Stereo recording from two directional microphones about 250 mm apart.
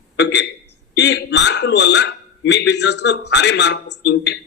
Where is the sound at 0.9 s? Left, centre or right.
Left.